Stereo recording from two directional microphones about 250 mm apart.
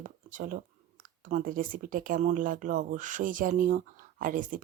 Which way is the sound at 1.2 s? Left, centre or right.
Right.